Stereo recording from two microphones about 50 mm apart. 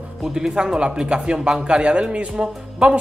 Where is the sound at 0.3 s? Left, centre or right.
Centre.